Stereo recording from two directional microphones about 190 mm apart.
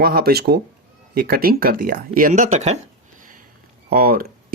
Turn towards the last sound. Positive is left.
turn(degrees=-50)  # may be behind; listen again after turning